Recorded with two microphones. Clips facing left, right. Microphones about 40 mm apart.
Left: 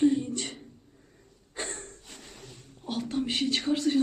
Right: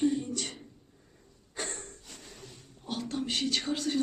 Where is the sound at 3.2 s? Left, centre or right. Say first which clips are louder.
Left 2 dB; centre.